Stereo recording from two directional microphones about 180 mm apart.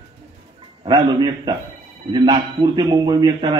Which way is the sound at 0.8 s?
25° right (ahead or behind).